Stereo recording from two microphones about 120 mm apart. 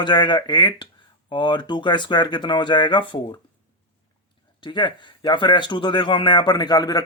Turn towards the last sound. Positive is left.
turn(degrees=35)  # may be behind; listen again after turning